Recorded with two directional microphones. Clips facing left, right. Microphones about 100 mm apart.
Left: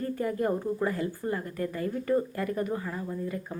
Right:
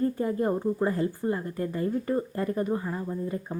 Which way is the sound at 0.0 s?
25° right (ahead or behind).